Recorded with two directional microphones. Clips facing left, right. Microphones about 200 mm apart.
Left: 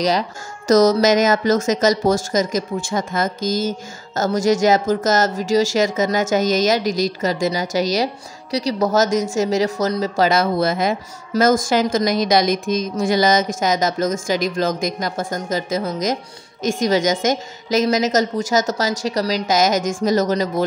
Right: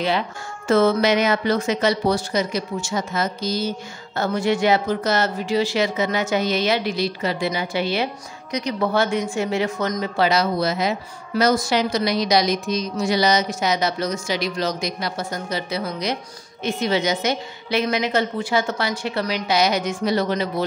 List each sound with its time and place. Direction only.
0.7 s a woman's voice: 40° left (ahead or behind)